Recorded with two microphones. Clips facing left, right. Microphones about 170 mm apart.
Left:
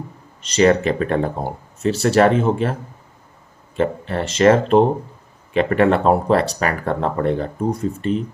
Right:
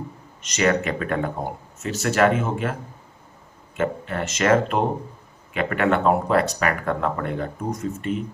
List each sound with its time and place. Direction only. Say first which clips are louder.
0.4 s speech: left 6 dB; 30° left (ahead or behind)
3.8 s speech: left 4 dB; 30° left (ahead or behind)